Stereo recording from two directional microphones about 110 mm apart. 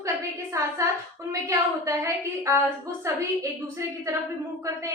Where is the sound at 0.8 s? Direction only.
25° right (ahead or behind).